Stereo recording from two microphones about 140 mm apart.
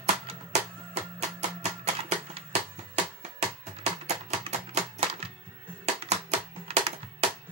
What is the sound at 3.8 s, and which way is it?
Music, 50° right (ahead or behind).